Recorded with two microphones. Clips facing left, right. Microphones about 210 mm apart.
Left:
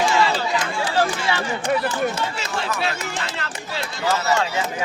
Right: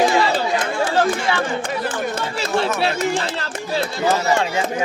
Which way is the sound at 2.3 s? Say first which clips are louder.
Right 6 dB; 40° right (ahead or behind).